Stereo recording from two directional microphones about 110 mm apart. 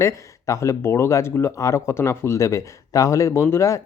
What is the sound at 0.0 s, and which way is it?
Speech, 25° left (ahead or behind).